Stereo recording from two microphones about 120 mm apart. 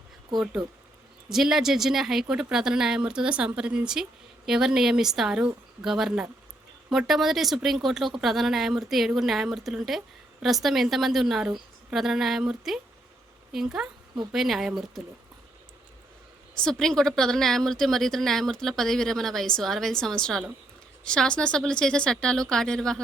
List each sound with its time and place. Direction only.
1.3 s speech: 5° right (ahead or behind)
16.6 s speech: 5° left (ahead or behind)